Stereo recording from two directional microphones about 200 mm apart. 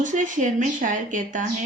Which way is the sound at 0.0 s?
40° right (ahead or behind).